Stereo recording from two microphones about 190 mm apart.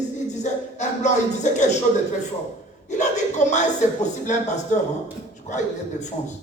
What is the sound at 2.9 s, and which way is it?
Speech, 40° left (ahead or behind).